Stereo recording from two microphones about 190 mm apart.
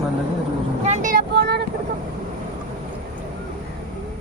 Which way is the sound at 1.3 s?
60° right (ahead or behind).